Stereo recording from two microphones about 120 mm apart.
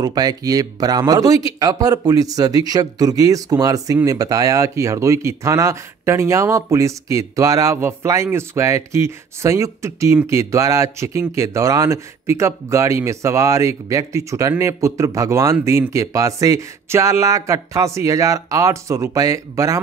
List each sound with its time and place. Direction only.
0.0 s speech: 35° right (ahead or behind)